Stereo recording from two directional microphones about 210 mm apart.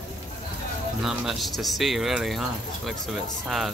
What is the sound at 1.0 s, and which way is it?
Speech, centre (ahead or behind).